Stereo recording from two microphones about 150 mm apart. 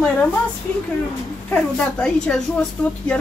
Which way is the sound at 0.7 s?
10° left (ahead or behind).